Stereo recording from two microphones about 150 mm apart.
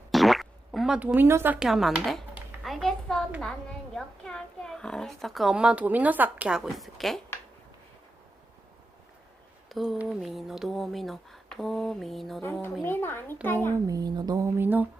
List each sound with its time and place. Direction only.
0.1 s boing: centre (ahead or behind)
1.5 s a child's voice: 5° right (ahead or behind)
2.3 s a sound: centre (ahead or behind)
3.4 s a child's voice: 5° left (ahead or behind)
9.6 s a child's voice: centre (ahead or behind)
12.8 s a child's voice: 15° left (ahead or behind)
13.7 s speech: 25° right (ahead or behind)